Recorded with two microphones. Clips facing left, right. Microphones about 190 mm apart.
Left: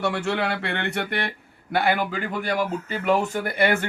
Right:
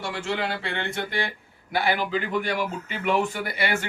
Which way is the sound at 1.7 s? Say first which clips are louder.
Left 2 dB; 55° left (ahead or behind).